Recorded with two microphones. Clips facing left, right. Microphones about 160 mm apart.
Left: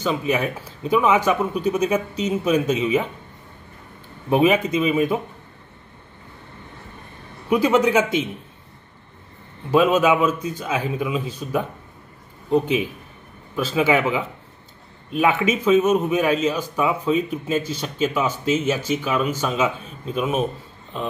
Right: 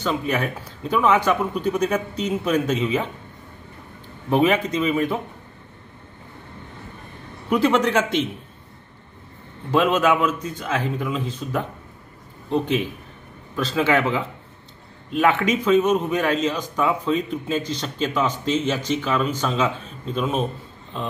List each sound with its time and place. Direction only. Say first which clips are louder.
0.0 s a man's voice: left 2 dB; 10° left (ahead or behind)
4.3 s a man's voice: left 1 dB; 10° left (ahead or behind)
7.4 s a man's voice: left 1 dB; 10° left (ahead or behind)
9.7 s a man's voice: left 2 dB; 10° left (ahead or behind)